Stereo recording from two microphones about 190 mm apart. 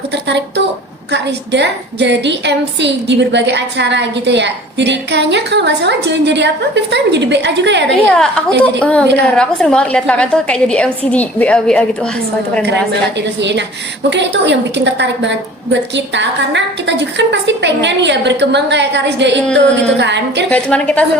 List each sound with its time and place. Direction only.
0.3 s a woman's voice: 65° right (ahead or behind)
8.0 s a woman's voice: 5° left (ahead or behind)
13.4 s a woman's voice: 65° right (ahead or behind)
20.5 s a woman's voice: 5° left (ahead or behind)